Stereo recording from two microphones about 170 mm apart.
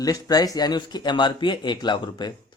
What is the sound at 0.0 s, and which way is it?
Speech, 20° left (ahead or behind).